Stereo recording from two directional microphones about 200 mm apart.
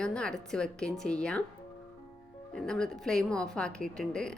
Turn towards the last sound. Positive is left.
turn(degrees=5)  # may be behind; listen again after turning